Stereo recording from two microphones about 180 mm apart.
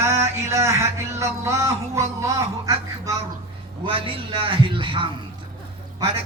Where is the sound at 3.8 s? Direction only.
30° right (ahead or behind).